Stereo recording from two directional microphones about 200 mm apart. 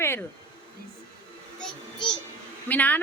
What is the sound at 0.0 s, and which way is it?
Speech, 10° left (ahead or behind).